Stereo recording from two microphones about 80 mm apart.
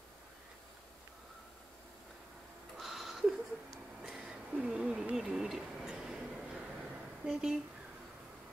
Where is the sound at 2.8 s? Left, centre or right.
Centre.